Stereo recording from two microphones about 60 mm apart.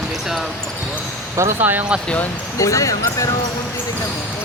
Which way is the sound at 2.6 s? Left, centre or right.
Left.